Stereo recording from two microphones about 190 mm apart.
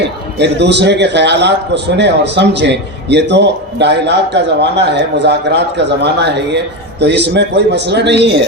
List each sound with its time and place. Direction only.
0.0 s a man's voice: 65° right (ahead or behind)